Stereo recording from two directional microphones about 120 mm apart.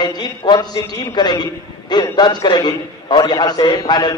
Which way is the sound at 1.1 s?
35° left (ahead or behind).